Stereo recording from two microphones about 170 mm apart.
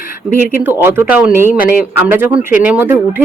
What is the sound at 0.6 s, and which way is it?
Speech, 10° right (ahead or behind).